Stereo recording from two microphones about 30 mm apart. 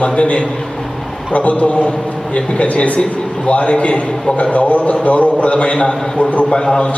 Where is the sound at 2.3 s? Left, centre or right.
Left.